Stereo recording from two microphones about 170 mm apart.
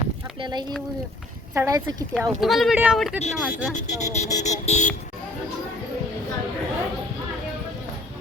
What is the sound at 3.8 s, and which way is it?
Speech, 45° left (ahead or behind).